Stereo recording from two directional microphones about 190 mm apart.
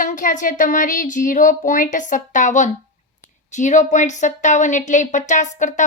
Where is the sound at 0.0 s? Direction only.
45° left (ahead or behind).